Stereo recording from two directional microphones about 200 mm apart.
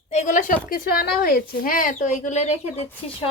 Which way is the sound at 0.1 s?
35° left (ahead or behind).